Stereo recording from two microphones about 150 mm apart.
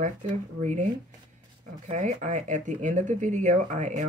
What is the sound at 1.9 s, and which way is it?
Speech, 55° right (ahead or behind).